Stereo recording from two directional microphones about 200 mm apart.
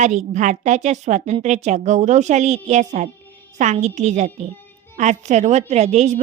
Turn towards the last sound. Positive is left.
turn(degrees=-35)  # may be behind; listen again after turning